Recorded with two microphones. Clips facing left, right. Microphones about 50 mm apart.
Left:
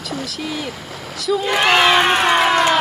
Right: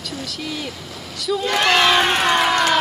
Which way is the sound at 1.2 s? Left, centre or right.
Centre.